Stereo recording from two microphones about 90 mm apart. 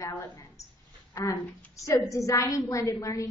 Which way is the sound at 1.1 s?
35° left (ahead or behind).